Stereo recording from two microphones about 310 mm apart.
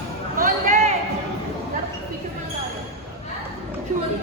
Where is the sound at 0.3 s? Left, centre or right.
Right.